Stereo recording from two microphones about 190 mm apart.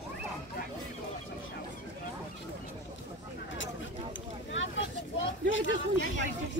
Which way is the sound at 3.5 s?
80° left.